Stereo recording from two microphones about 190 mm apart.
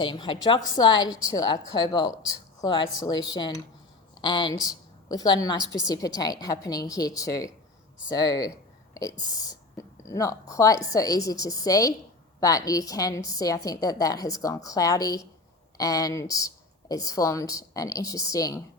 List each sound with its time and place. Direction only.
0.0 s a woman's voice: 25° left (ahead or behind)